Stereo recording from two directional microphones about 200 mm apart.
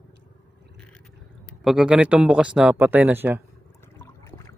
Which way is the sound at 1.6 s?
Centre (ahead or behind).